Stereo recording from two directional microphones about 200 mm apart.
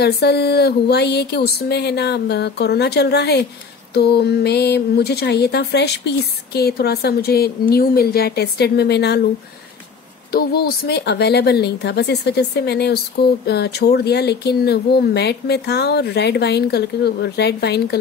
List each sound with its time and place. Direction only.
0.0 s a woman's voice: 55° left (ahead or behind)
10.3 s a woman's voice: 50° left (ahead or behind)